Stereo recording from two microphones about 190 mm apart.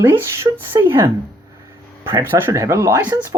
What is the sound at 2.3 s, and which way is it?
Speech, 10° right (ahead or behind).